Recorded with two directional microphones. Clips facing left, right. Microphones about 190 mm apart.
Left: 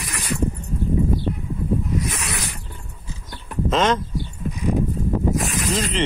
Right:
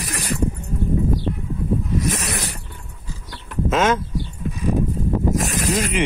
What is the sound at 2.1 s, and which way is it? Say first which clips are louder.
Zipper: right 4 dB; 40° right (ahead or behind).